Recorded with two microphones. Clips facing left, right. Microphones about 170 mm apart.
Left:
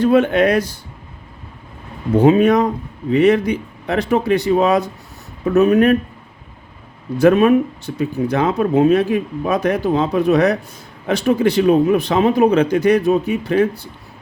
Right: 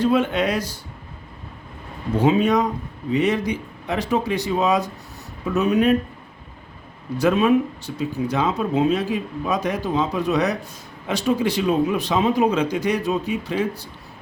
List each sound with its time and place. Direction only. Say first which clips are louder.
0.0 s speech: left 6 dB; 60° left (ahead or behind)
2.2 s speech: left 5 dB; 55° left (ahead or behind)
7.2 s speech: left 6 dB; 55° left (ahead or behind)